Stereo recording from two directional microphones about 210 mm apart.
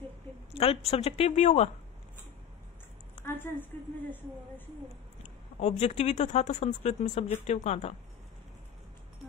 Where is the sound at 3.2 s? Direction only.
10° left (ahead or behind).